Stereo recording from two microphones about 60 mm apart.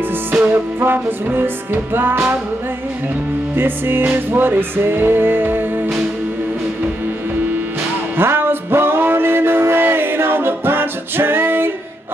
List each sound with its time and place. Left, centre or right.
0.5 s music: right
3.5 s music: right
8.2 s music: right